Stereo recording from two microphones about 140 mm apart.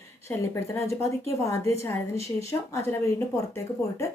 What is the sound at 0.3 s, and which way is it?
Speech, 20° left (ahead or behind).